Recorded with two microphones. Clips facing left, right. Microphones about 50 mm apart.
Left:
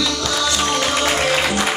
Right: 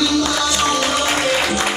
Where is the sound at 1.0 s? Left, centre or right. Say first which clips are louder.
Even; centre.